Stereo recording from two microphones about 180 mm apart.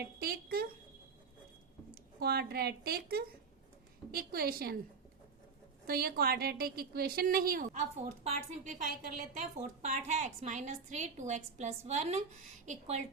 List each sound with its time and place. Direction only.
0.0 s speech: 60° right (ahead or behind)
2.1 s a woman's voice: 60° right (ahead or behind)
5.8 s a woman's voice: 55° right (ahead or behind)